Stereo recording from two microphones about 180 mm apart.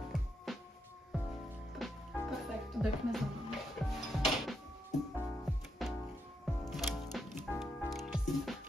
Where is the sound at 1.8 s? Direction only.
Centre (ahead or behind).